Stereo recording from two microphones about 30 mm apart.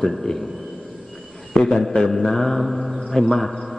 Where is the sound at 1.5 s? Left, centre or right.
Left.